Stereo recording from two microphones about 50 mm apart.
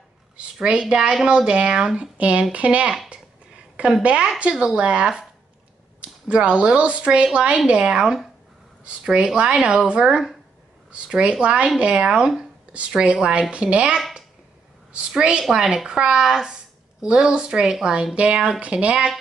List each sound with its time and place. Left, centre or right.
0.4 s a woman's voice: centre
2.0 s a woman's voice: right
3.1 s a sound: right
4.0 s a woman's voice: right
9.6 s a woman's voice: centre